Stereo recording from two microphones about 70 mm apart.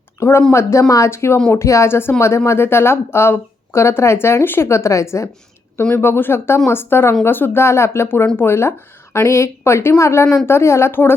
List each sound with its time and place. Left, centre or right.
0.2 s a woman's voice: left
6.0 s a woman's voice: left